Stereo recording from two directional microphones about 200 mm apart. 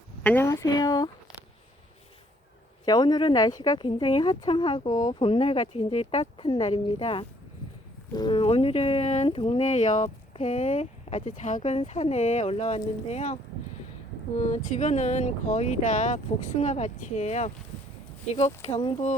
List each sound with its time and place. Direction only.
0.2 s speech: 10° left (ahead or behind)
2.8 s speech: 20° left (ahead or behind)